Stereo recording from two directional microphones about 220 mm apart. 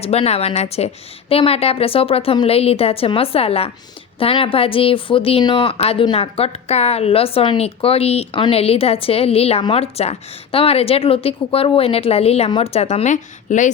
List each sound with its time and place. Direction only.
0.0 s a woman's voice: 30° left (ahead or behind)